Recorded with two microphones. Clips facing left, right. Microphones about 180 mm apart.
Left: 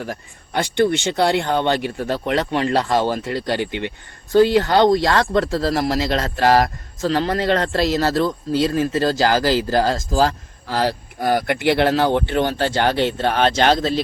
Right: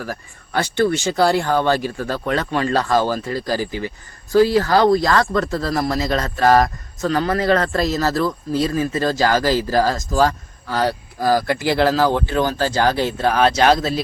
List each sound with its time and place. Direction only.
0.0 s speech: 20° left (ahead or behind)
3.6 s speech: 70° left (ahead or behind)
4.5 s speech: 25° left (ahead or behind)
11.3 s speech: 35° right (ahead or behind)
11.9 s speech: 25° left (ahead or behind)